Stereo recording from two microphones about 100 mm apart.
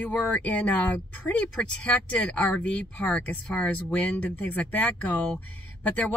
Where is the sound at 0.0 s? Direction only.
15° left (ahead or behind).